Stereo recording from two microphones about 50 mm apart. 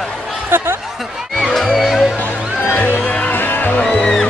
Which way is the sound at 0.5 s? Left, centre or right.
Right.